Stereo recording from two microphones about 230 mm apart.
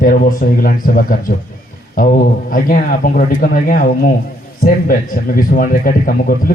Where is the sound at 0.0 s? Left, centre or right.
Left.